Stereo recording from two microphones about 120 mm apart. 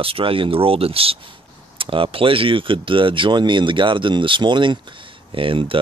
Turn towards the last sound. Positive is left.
turn(degrees=-45)  # may be behind; listen again after turning